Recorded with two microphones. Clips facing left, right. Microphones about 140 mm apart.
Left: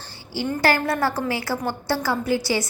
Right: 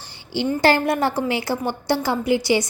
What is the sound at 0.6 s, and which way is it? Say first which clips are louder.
A woman's voice: right 3 dB; 20° right (ahead or behind).